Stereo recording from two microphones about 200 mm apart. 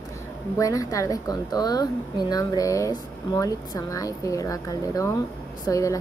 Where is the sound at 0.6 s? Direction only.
15° left (ahead or behind).